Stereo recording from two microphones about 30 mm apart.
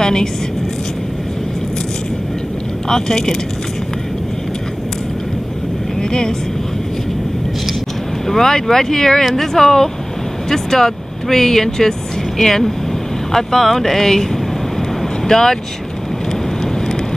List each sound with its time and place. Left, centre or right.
0.0 s a woman's voice: left
2.9 s speech: centre
6.0 s speech: left
8.3 s speech: centre
9.2 s speech: centre
15.2 s speech: centre